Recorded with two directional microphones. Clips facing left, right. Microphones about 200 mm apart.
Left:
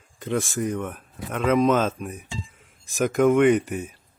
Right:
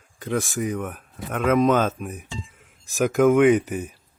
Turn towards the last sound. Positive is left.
turn(degrees=0)  # may be behind; listen again after turning